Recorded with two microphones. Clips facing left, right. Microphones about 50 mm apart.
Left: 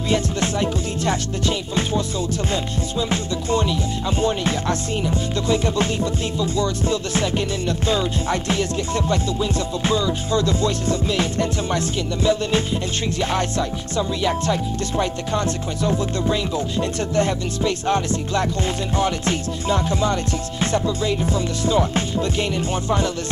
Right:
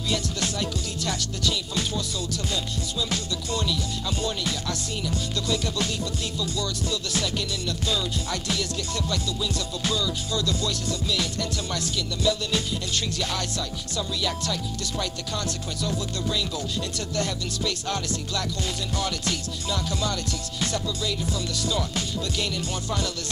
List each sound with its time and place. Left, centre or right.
0.1 s music: left
3.1 s music: left
4.2 s speech: left